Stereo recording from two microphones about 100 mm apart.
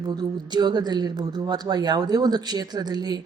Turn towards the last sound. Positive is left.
turn(degrees=-45)  # may be behind; listen again after turning